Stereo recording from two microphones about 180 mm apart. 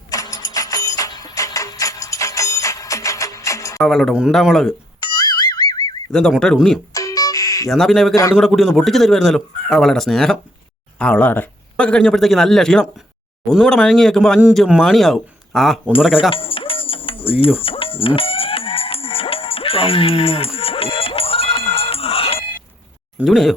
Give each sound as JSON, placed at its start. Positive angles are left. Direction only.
{"t": 0.1, "sound": "music", "side_deg": 20}
{"t": 3.8, "sound": "speech", "side_deg": 0}
{"t": 5.1, "sound": "music", "side_deg": 25}
{"t": 6.1, "sound": "speech", "side_deg": 5}
{"t": 6.9, "sound": "a sound", "side_deg": 20}
{"t": 7.7, "sound": "speech", "side_deg": 0}
{"t": 8.1, "sound": "a man's voice", "side_deg": 20}
{"t": 8.4, "sound": "speech", "side_deg": 0}
{"t": 16.3, "sound": "music", "side_deg": 30}
{"t": 23.1, "sound": "speech", "side_deg": 0}